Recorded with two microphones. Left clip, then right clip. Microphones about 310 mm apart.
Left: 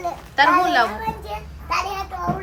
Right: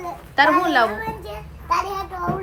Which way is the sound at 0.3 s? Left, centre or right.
Centre.